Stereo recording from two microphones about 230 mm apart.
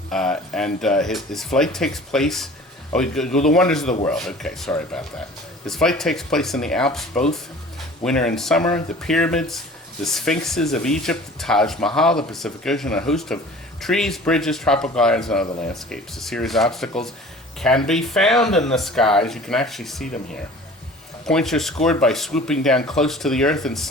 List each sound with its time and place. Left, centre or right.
0.1 s speech: centre
21.2 s speech: centre